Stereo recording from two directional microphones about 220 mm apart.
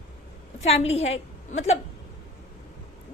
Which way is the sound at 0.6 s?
30° left (ahead or behind).